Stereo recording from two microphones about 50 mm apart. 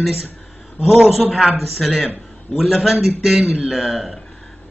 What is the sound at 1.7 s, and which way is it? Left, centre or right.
Speech, centre.